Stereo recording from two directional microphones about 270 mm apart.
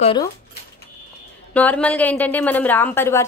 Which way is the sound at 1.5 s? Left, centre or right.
Centre.